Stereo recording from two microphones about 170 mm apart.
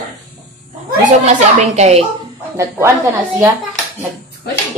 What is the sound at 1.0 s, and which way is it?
A child's voice, 45° right (ahead or behind).